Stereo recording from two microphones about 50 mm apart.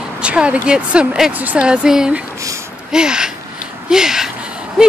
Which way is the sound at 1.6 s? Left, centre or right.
Centre.